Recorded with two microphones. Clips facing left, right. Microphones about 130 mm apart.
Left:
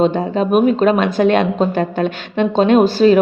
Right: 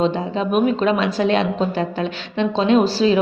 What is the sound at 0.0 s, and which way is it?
A woman's voice, 50° left (ahead or behind).